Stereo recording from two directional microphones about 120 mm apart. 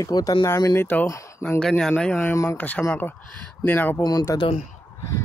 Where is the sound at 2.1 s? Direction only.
20° left (ahead or behind).